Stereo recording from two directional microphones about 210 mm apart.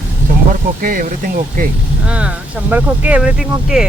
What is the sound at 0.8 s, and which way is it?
Speech, 40° right (ahead or behind).